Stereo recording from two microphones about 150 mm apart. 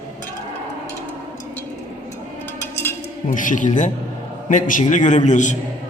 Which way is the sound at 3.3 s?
60° left (ahead or behind).